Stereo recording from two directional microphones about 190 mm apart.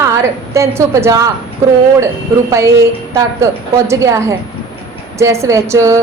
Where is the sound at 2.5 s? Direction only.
15° right (ahead or behind).